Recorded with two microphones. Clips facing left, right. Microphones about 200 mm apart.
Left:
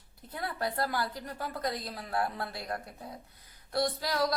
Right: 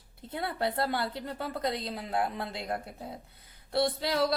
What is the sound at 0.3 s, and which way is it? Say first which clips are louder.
Speech: right 3 dB; 25° right (ahead or behind).